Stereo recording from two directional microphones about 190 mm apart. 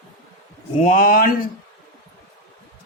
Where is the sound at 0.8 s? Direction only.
45° left (ahead or behind).